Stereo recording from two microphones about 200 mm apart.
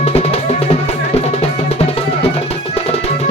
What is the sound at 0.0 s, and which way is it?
Music, 30° left (ahead or behind).